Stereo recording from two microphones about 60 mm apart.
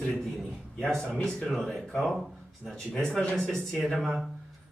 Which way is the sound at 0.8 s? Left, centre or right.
Centre.